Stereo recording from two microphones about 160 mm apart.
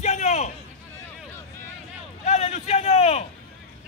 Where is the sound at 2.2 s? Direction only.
40° left (ahead or behind).